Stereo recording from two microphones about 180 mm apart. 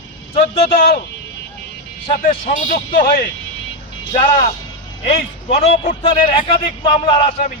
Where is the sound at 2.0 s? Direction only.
40° left (ahead or behind); by 3.2 s 55° left (ahead or behind).